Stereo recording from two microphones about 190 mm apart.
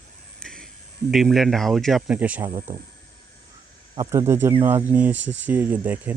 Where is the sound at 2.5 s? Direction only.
25° right (ahead or behind).